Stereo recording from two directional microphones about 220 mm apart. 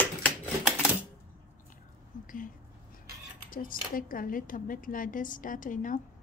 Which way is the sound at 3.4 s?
40° left (ahead or behind).